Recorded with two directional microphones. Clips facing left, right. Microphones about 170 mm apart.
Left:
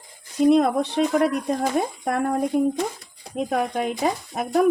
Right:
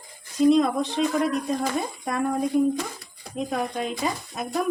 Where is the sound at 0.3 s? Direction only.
60° left (ahead or behind).